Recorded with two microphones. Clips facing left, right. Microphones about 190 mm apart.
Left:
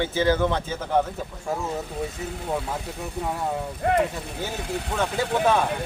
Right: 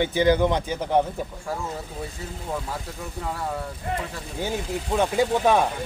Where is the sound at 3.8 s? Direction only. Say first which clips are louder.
Left 9 dB; 65° left (ahead or behind).